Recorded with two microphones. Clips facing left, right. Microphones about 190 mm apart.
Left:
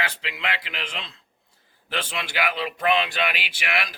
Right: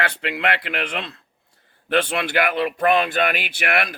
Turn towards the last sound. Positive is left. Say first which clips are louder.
# right 6 dB
turn(degrees=-55)  # may be behind; listen again after turning